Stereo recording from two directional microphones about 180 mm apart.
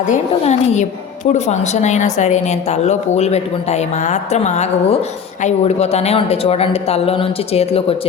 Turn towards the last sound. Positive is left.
turn(degrees=35)  # may be behind; listen again after turning